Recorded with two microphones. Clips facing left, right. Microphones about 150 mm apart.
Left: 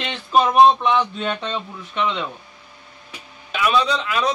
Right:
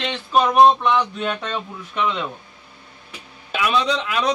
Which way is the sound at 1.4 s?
25° left (ahead or behind).